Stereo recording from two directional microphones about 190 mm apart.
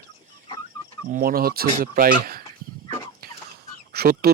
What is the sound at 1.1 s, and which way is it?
Speech, 50° right (ahead or behind).